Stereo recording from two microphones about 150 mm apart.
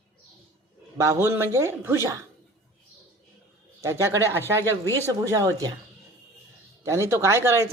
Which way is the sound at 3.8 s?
15° right (ahead or behind).